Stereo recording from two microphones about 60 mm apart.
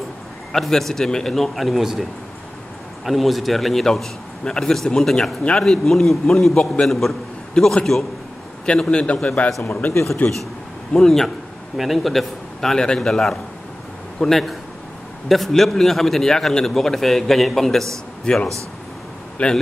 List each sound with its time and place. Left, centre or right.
0.5 s a man's voice: centre
3.1 s a man's voice: centre
10.2 s a man's voice: left
10.9 s a man's voice: centre